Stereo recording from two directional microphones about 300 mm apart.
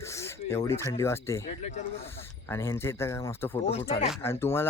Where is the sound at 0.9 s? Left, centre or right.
Centre.